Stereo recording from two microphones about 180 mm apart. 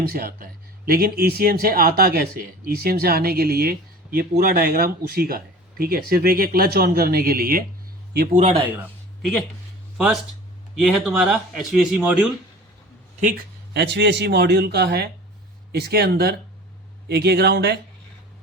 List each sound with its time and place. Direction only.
0.0 s a man's voice: 55° right (ahead or behind)
10.8 s speech: centre (ahead or behind)
13.1 s speech: 45° right (ahead or behind)
13.7 s a man's voice: 70° right (ahead or behind)